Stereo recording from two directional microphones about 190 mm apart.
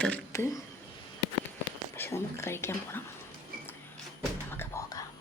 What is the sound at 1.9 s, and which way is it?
Speech, 10° left (ahead or behind).